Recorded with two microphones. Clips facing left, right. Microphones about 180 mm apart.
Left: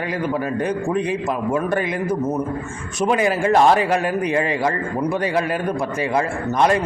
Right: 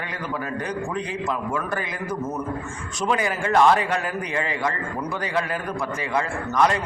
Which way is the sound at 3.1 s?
25° left (ahead or behind).